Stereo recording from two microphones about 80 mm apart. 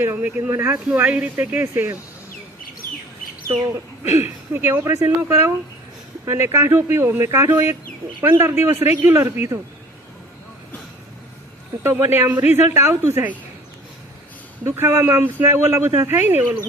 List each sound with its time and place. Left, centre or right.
0.0 s speech: right
4.0 s speech: right
11.8 s speech: right
14.6 s speech: right